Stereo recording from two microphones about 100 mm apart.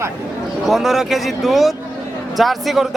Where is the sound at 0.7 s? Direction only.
Centre (ahead or behind).